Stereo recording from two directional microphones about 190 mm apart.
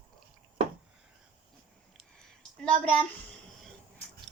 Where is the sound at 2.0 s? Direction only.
5° left (ahead or behind).